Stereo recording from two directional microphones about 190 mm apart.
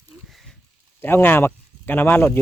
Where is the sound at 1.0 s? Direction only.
10° left (ahead or behind).